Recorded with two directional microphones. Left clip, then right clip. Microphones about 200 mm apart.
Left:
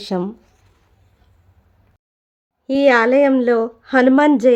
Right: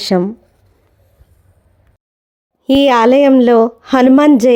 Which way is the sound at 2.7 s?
35° right (ahead or behind).